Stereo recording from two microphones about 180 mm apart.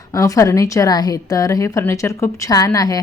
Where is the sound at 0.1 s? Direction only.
20° left (ahead or behind).